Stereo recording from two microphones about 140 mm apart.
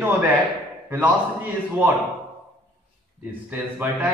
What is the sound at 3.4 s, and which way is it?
Speech, 10° right (ahead or behind).